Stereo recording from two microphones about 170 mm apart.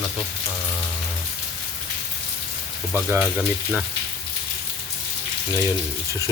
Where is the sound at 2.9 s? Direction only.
10° right (ahead or behind).